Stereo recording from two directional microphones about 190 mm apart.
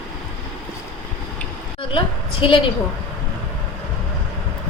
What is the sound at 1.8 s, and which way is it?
Speech, 25° left (ahead or behind).